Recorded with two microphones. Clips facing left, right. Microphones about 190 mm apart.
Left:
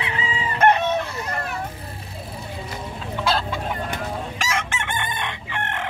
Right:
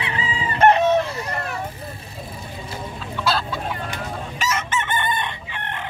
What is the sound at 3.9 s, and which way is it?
Chicken, 85° left.